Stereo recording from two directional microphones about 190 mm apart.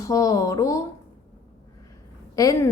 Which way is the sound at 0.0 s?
15° left (ahead or behind).